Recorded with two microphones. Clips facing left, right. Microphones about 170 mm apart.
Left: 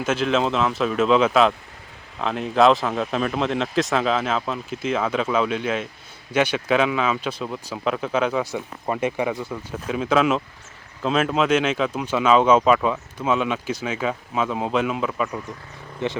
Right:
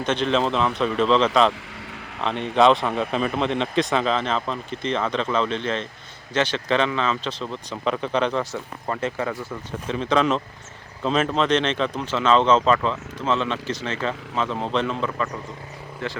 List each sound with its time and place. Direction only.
0.0 s speech: 5° left (ahead or behind)
16.0 s speech: 20° left (ahead or behind)